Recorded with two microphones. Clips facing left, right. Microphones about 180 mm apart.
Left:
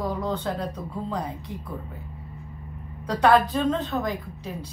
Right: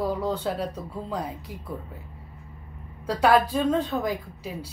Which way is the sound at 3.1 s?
5° right (ahead or behind).